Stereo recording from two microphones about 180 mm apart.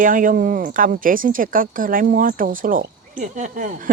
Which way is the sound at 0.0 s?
50° right (ahead or behind).